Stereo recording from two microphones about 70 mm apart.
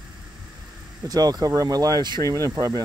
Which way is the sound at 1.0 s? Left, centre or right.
Right.